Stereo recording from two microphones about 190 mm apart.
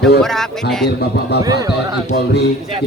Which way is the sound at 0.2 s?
Centre (ahead or behind).